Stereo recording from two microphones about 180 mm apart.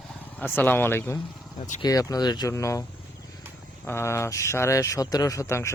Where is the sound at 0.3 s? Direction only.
10° left (ahead or behind).